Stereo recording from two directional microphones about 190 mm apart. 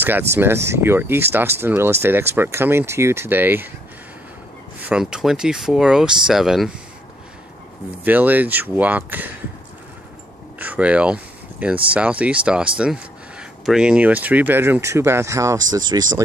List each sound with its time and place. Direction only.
0.0 s speech: 10° right (ahead or behind)
4.7 s speech: 5° right (ahead or behind)
8.0 s speech: 10° right (ahead or behind)
10.6 s speech: 10° right (ahead or behind)